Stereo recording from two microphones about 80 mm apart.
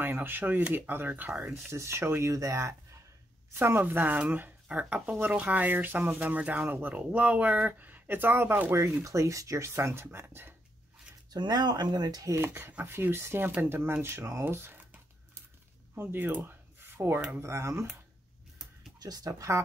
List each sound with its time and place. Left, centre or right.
0.0 s speech: right
1.7 s speech: right
3.5 s speech: right
9.0 s speech: right
11.3 s speech: right
12.4 s speech: right
14.0 s a sound: right
15.9 s speech: right
16.4 s a sound: right
17.4 s speech: right
18.9 s speech: right